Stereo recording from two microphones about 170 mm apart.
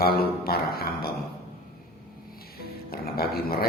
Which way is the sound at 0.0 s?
60° left (ahead or behind).